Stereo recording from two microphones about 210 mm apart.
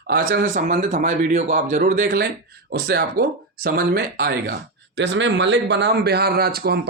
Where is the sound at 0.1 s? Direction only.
45° right (ahead or behind).